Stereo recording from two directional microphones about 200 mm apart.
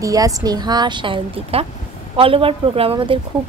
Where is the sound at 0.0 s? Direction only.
15° right (ahead or behind).